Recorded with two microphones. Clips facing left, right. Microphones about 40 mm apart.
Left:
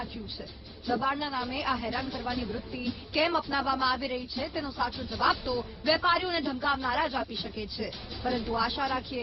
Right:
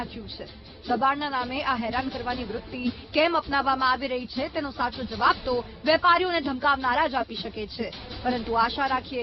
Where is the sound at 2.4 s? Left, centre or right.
Centre.